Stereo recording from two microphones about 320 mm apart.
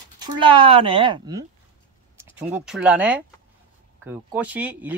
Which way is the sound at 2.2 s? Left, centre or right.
Centre.